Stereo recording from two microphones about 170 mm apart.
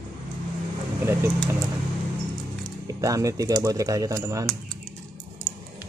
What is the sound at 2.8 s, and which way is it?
Speech, 20° right (ahead or behind).